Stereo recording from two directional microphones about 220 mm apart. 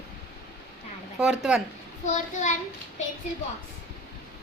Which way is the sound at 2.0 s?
35° left (ahead or behind).